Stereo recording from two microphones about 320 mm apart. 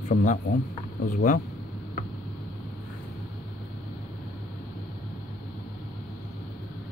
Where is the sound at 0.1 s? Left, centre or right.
Left.